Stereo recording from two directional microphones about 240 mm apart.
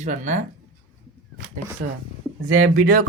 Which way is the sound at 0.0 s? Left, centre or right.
Right.